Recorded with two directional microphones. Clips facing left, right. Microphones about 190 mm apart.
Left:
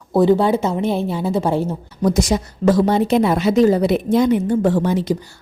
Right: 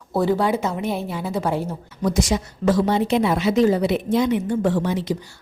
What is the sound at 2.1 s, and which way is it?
Speech, 40° left (ahead or behind).